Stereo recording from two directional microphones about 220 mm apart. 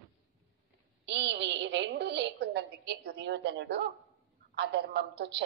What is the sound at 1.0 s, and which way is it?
A woman's voice, 55° right (ahead or behind).